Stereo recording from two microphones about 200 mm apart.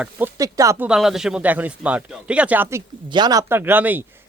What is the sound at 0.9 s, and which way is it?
A man's voice, centre (ahead or behind).